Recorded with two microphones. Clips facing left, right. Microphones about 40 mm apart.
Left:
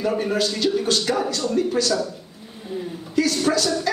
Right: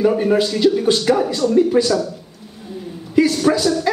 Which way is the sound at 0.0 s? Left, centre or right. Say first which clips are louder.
Right 6 dB; centre.